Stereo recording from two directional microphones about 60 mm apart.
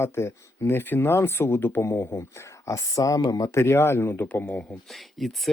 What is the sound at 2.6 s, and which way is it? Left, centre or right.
Speech, left.